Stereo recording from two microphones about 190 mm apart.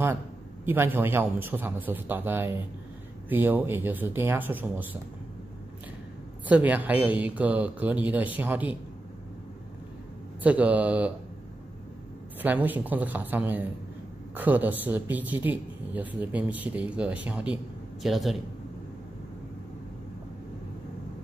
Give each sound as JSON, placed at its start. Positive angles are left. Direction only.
{"t": 0.7, "sound": "speech", "side_deg": -10}
{"t": 6.4, "sound": "speech", "side_deg": -10}
{"t": 10.4, "sound": "speech", "side_deg": -10}
{"t": 12.4, "sound": "a man's voice", "side_deg": -10}